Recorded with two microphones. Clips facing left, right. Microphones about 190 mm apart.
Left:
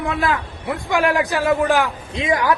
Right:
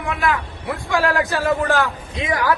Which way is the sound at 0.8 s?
20° left (ahead or behind).